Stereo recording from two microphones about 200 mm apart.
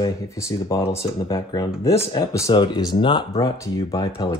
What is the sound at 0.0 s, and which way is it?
Speech, 15° left (ahead or behind).